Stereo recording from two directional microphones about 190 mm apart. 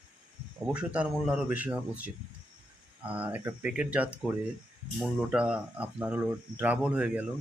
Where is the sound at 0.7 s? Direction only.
5° right (ahead or behind).